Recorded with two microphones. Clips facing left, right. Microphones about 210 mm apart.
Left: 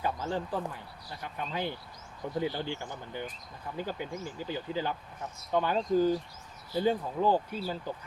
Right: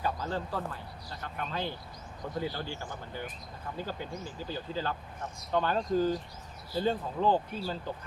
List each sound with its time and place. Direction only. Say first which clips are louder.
0.0 s speech: left 1 dB; 15° left (ahead or behind)